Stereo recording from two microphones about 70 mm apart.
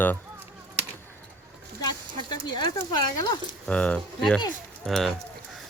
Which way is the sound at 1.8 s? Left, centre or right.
Left.